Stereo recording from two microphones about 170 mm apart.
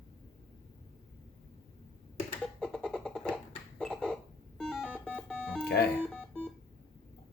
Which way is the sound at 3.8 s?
5° left (ahead or behind).